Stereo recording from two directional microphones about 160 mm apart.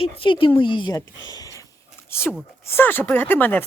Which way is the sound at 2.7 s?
15° left (ahead or behind).